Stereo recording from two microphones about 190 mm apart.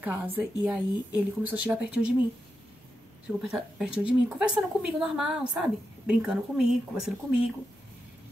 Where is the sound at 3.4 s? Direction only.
5° right (ahead or behind).